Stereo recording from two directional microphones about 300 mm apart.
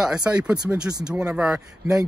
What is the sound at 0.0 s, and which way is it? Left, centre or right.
Speech, centre.